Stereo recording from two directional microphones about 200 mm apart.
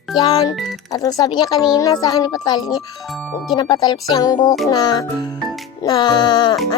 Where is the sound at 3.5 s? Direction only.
20° left (ahead or behind).